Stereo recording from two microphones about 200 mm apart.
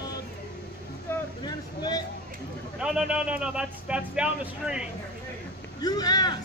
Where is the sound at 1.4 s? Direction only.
20° left (ahead or behind).